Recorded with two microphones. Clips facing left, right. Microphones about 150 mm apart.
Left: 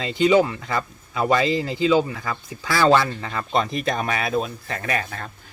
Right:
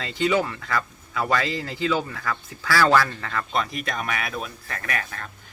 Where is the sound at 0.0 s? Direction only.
20° left (ahead or behind).